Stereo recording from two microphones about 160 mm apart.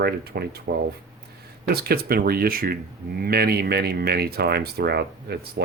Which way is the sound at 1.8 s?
70° right (ahead or behind).